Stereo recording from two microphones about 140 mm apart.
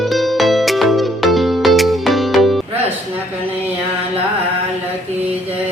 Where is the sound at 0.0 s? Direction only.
Centre (ahead or behind).